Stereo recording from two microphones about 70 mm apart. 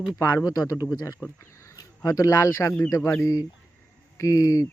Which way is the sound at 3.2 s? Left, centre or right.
Left.